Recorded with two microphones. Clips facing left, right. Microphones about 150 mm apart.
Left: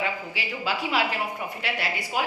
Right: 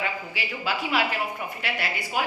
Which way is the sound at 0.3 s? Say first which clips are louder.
Even; 30° left (ahead or behind).